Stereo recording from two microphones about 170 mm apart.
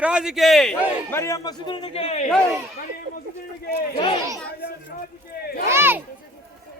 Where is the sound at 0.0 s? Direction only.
5° right (ahead or behind).